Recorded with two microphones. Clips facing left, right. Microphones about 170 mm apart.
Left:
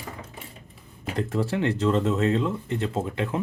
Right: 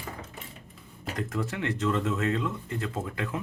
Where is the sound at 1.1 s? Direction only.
30° left (ahead or behind).